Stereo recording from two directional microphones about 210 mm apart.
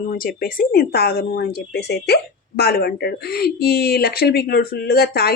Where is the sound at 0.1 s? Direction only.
45° left (ahead or behind).